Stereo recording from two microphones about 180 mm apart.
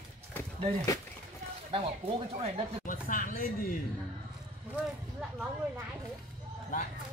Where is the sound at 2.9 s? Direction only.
50° left (ahead or behind).